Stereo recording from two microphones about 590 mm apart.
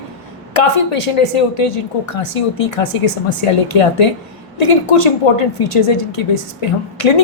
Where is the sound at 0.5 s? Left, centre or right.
Left.